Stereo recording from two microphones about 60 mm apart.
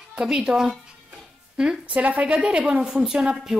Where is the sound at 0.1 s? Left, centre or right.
Centre.